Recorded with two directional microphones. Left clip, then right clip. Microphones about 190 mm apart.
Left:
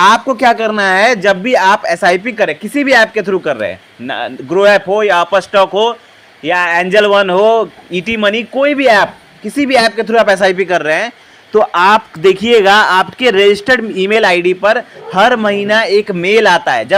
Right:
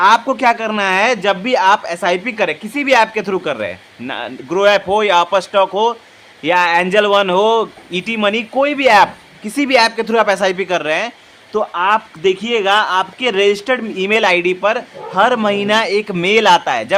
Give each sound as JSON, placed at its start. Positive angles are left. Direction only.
{"t": 0.3, "sound": "speech", "side_deg": 15}
{"t": 6.4, "sound": "speech", "side_deg": 0}
{"t": 11.5, "sound": "speech", "side_deg": 25}